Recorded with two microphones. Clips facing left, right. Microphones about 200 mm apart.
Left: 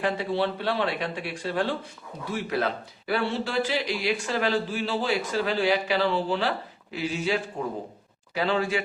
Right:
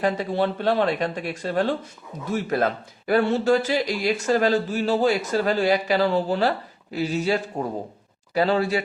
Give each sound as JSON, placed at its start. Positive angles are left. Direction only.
{"t": 0.0, "sound": "speech", "side_deg": -45}